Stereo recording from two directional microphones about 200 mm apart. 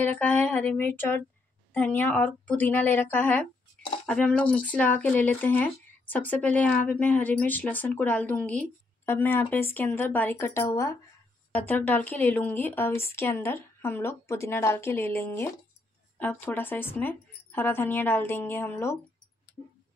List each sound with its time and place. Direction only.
0.2 s speech: 10° left (ahead or behind)